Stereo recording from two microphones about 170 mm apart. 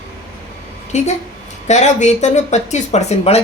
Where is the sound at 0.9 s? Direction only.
40° left (ahead or behind).